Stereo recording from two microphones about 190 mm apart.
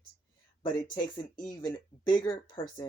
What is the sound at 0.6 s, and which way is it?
Speech, 20° left (ahead or behind).